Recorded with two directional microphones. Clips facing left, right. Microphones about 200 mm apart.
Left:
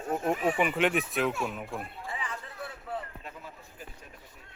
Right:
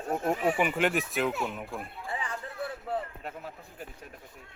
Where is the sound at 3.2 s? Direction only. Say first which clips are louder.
Right 5 dB; 60° right (ahead or behind).